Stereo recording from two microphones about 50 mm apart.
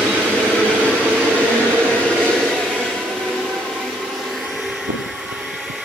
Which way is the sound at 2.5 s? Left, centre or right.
Centre.